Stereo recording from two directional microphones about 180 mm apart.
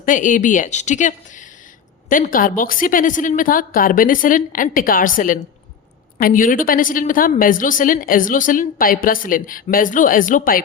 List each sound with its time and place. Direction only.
0.0 s a woman's voice: 45° left (ahead or behind)